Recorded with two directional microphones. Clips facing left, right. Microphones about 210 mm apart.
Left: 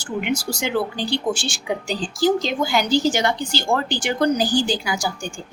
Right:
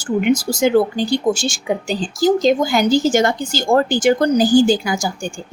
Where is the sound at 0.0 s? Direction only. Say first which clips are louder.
Right 8 dB; 45° right (ahead or behind).